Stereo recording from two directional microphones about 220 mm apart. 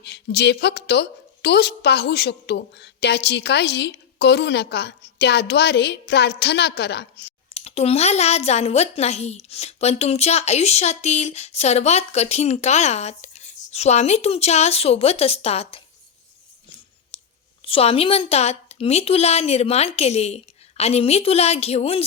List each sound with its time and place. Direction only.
0.0 s a woman's voice: 50° left (ahead or behind)
7.5 s a woman's voice: 30° left (ahead or behind)
17.7 s a woman's voice: 25° left (ahead or behind)